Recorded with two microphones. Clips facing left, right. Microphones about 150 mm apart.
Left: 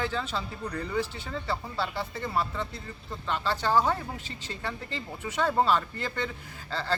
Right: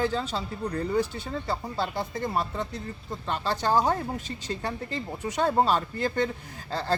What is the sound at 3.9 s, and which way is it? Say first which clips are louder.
Speech: right 3 dB; 40° right (ahead or behind).